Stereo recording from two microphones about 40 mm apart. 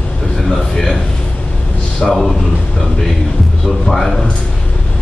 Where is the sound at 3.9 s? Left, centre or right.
Centre.